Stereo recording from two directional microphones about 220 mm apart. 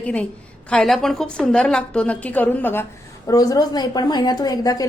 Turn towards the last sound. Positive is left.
turn(degrees=15)  # may be behind; listen again after turning